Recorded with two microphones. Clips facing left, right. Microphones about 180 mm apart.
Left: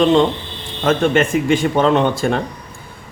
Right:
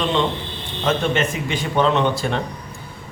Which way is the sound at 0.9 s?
50° left (ahead or behind).